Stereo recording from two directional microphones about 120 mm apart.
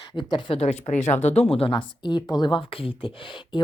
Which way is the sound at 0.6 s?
65° left (ahead or behind).